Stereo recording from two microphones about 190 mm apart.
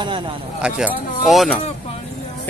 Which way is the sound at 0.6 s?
5° right (ahead or behind).